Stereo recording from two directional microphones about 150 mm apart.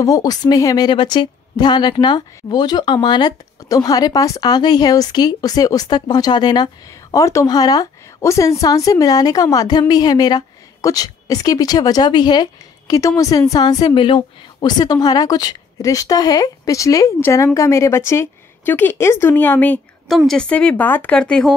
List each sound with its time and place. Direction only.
0.0 s a woman's voice: 25° left (ahead or behind)
20.1 s speech: centre (ahead or behind)